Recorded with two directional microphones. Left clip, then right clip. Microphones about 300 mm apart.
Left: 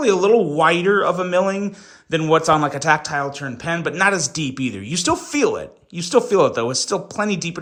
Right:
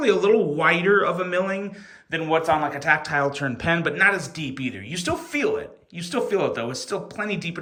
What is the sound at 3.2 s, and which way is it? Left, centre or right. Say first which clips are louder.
Speech: right 1 dB; centre.